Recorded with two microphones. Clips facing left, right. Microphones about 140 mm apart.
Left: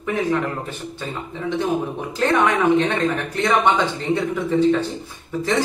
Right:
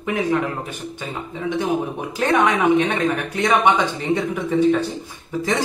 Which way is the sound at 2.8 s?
15° right (ahead or behind).